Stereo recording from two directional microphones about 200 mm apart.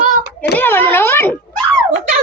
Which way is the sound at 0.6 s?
10° left (ahead or behind).